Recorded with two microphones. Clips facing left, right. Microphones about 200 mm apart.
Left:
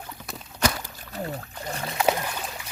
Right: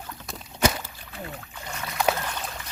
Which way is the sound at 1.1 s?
40° left (ahead or behind).